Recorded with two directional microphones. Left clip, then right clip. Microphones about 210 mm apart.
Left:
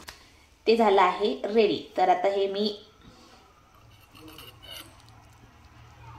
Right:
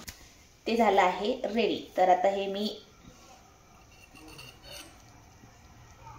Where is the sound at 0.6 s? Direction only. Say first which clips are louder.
Left 4 dB; 15° right (ahead or behind).